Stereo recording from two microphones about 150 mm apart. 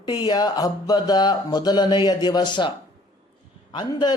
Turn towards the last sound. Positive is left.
turn(degrees=35)  # may be behind; listen again after turning